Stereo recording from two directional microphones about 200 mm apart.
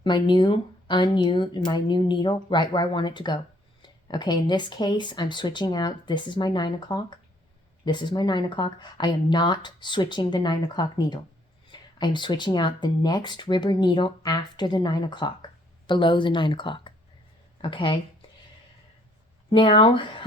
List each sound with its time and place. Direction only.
0.0 s speech: 25° left (ahead or behind)
19.5 s speech: 25° left (ahead or behind)